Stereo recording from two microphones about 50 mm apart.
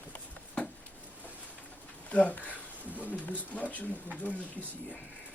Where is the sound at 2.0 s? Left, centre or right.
Left.